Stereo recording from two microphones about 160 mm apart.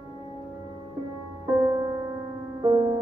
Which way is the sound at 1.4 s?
20° right (ahead or behind).